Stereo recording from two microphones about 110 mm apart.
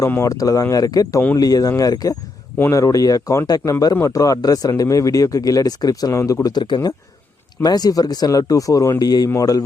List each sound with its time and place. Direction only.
0.2 s speech: 30° left (ahead or behind)